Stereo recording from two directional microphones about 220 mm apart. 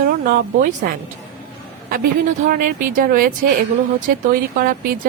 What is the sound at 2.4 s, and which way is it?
A woman's voice, 40° right (ahead or behind).